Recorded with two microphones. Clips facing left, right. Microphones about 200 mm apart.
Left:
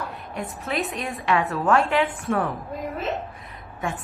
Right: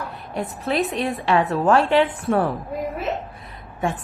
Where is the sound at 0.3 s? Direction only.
35° right (ahead or behind).